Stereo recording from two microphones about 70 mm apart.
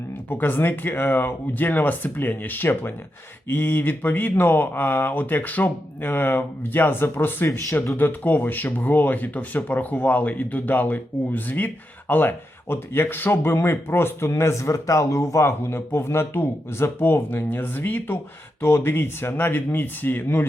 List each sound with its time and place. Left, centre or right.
0.3 s speech: left